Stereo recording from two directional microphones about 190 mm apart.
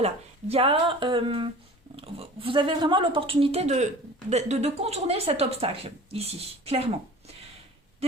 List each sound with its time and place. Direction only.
0.0 s speech: 30° right (ahead or behind)